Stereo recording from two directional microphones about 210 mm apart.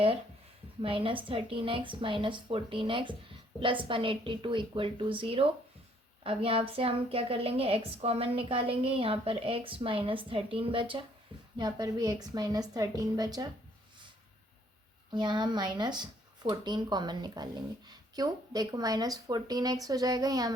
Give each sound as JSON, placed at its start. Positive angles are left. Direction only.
{"t": 0.8, "sound": "a woman's voice", "side_deg": -25}
{"t": 15.1, "sound": "speech", "side_deg": -20}